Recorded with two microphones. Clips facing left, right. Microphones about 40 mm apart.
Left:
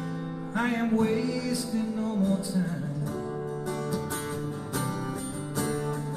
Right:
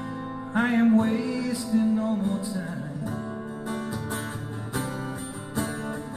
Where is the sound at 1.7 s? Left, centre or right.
Centre.